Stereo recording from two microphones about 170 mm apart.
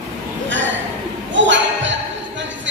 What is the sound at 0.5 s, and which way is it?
Hiccup, 90° right.